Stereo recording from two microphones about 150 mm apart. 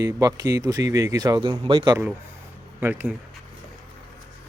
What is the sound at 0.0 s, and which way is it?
Speech, 25° right (ahead or behind).